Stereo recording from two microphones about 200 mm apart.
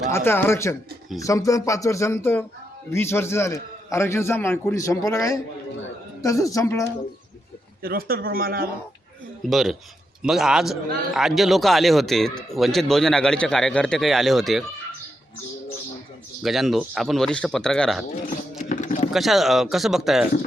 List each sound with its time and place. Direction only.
0.1 s a man's voice: 10° left (ahead or behind)
7.8 s speech: 45° right (ahead or behind)
9.5 s speech: centre (ahead or behind)
16.4 s speech: centre (ahead or behind)
18.7 s a sound: 40° left (ahead or behind)
19.1 s speech: centre (ahead or behind)